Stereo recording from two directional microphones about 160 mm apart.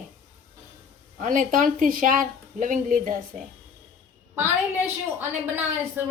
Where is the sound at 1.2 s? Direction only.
55° right (ahead or behind).